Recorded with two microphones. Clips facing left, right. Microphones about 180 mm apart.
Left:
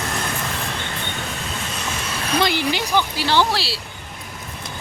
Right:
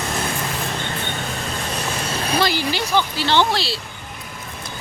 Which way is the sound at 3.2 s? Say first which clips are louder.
Right 1 dB; 5° left (ahead or behind).